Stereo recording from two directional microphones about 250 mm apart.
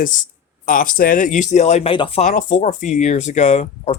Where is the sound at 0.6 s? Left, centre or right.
Left.